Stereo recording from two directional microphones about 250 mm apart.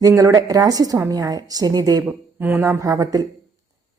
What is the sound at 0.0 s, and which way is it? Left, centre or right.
A woman's voice, centre.